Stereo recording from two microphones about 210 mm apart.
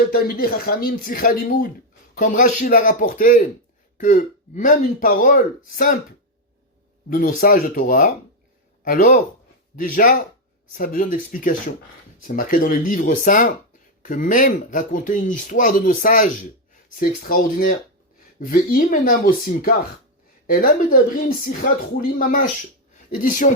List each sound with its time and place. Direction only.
0.1 s speech: 45° left (ahead or behind)
7.1 s speech: 40° left (ahead or behind)